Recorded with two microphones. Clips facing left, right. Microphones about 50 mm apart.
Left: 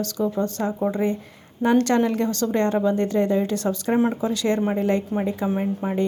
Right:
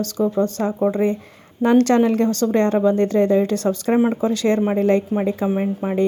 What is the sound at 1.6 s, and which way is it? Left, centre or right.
A woman's voice, right.